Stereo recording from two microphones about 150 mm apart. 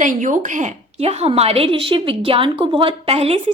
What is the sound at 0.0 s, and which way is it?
A woman's voice, 60° right (ahead or behind).